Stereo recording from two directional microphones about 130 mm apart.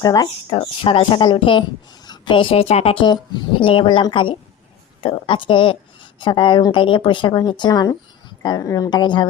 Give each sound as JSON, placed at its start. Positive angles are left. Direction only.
{"t": 0.0, "sound": "speech", "side_deg": 30}